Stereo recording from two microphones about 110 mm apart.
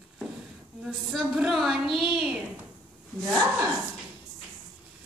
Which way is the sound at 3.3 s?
25° right (ahead or behind).